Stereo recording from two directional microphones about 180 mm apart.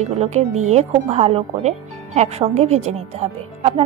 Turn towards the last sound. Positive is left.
turn(degrees=-35)  # may be behind; listen again after turning